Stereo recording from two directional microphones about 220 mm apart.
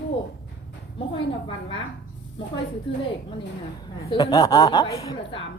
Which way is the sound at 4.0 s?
20° left (ahead or behind).